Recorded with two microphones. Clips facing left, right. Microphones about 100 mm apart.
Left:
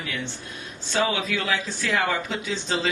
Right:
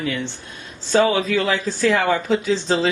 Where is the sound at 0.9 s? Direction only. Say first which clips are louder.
Right 8 dB; 35° right (ahead or behind).